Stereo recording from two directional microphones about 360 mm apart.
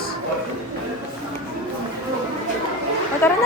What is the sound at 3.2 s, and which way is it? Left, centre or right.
Speech, centre.